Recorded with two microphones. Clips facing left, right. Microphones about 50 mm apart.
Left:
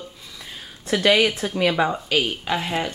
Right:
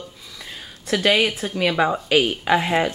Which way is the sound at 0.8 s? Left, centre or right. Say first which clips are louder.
Left 1 dB; centre.